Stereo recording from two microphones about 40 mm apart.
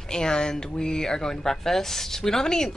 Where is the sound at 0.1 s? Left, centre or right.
Centre.